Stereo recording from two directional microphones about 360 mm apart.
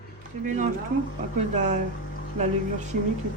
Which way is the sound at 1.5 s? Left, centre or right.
Centre.